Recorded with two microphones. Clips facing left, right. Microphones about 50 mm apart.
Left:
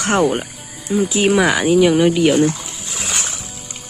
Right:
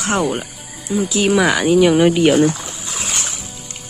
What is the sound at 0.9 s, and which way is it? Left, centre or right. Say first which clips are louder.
Speech: left 2 dB; centre.